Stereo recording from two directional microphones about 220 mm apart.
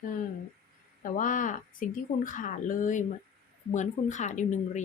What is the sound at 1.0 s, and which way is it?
A woman's voice, 35° left (ahead or behind).